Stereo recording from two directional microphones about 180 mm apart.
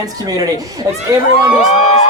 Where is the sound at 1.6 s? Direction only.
35° left (ahead or behind).